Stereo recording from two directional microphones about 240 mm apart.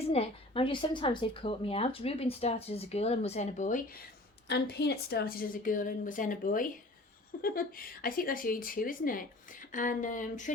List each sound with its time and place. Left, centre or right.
0.1 s a woman's voice: left
4.4 s a woman's voice: left